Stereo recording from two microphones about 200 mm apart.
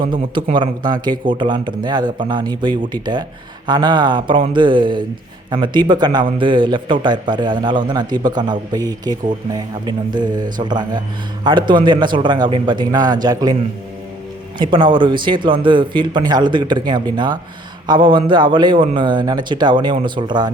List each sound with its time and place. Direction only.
0.1 s speech: 25° right (ahead or behind)
14.6 s speech: 25° right (ahead or behind)